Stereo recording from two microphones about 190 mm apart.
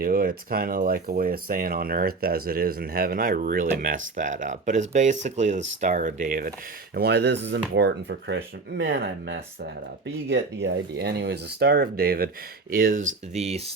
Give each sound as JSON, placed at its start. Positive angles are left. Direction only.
{"t": 0.0, "sound": "speech", "side_deg": -50}
{"t": 6.9, "sound": "speech", "side_deg": -60}
{"t": 13.3, "sound": "speech", "side_deg": -35}